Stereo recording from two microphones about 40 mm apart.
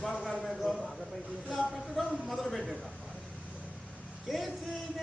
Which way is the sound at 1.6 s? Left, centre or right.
Centre.